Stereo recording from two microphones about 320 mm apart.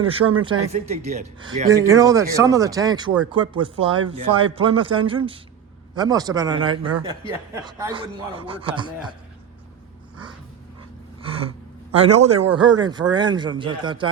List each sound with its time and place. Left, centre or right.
0.0 s speech: centre
11.3 s speech: centre